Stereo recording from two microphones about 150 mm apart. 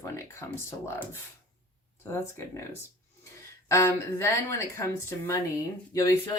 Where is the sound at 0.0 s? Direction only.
20° left (ahead or behind).